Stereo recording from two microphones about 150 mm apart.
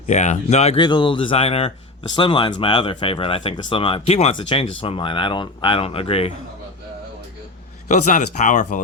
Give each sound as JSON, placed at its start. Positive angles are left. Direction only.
{"t": 0.1, "sound": "speech", "side_deg": 50}
{"t": 0.8, "sound": "speech", "side_deg": 30}
{"t": 7.9, "sound": "speech", "side_deg": 55}